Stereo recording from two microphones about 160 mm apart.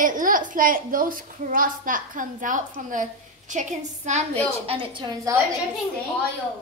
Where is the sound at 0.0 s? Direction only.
55° right (ahead or behind).